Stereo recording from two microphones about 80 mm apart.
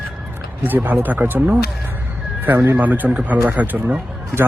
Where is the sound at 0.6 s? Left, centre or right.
Right.